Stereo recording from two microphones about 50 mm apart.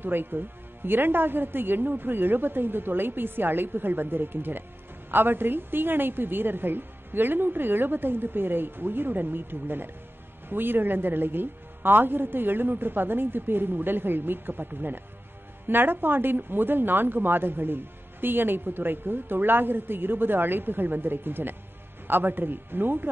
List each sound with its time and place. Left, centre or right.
0.0 s speech: right